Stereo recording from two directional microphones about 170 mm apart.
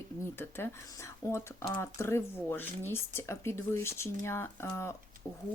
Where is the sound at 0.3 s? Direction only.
15° left (ahead or behind).